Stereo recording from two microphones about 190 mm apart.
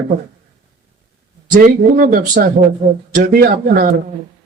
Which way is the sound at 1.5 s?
50° right (ahead or behind).